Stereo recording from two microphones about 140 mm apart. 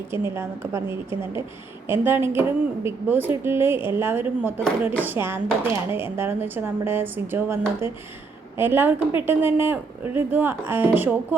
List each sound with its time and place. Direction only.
0.1 s speech: 15° right (ahead or behind)